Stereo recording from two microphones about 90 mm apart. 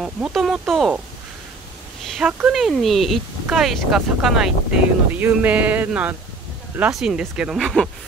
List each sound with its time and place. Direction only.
0.0 s speech: centre (ahead or behind)
2.2 s speech: 5° right (ahead or behind)
5.1 s speech: 20° right (ahead or behind)
6.9 s speech: 5° right (ahead or behind)
7.6 s speech: 5° left (ahead or behind)